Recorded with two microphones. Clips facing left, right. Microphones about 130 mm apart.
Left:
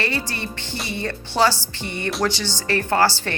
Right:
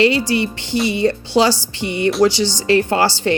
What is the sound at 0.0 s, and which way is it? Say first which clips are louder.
Speech: right 11 dB; 15° right (ahead or behind).